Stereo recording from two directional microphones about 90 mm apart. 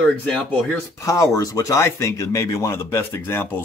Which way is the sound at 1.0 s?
35° left (ahead or behind).